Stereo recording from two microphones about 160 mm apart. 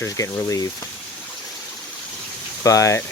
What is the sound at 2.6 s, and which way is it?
Speech, 20° left (ahead or behind).